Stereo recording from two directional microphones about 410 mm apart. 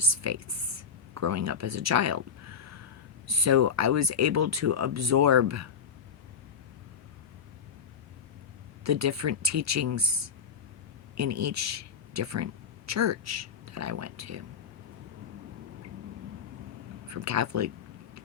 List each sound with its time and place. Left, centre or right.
0.0 s a sound: right
3.2 s speech: right
8.8 s speech: right
17.1 s speech: right